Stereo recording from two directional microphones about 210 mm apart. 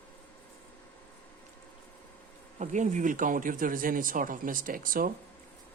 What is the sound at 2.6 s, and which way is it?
Speech, 35° right (ahead or behind).